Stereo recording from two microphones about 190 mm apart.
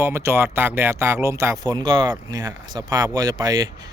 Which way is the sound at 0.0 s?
15° right (ahead or behind).